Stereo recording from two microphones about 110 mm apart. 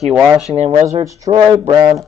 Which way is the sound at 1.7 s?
40° right (ahead or behind).